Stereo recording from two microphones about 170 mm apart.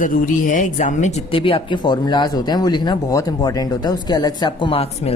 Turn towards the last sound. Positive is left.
turn(degrees=35)  # may be behind; listen again after turning